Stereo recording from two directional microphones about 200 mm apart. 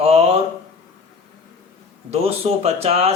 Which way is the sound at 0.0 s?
30° right (ahead or behind).